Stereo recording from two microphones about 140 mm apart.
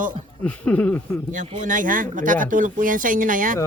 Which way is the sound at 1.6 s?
70° right (ahead or behind).